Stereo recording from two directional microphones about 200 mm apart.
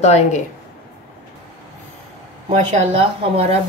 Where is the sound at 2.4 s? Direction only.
30° right (ahead or behind).